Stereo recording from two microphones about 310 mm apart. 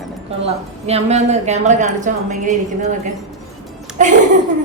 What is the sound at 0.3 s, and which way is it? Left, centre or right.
A woman's voice, centre.